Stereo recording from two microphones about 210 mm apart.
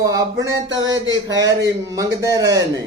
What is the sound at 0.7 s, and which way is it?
Speech, 65° right (ahead or behind).